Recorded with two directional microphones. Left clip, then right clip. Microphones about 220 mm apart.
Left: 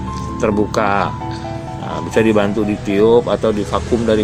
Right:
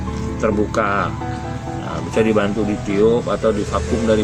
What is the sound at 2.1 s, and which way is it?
Speech, 25° left (ahead or behind).